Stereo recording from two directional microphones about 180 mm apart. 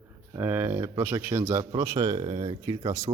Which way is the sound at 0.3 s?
10° right (ahead or behind).